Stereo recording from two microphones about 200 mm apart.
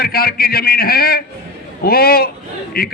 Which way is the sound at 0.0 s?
50° left (ahead or behind).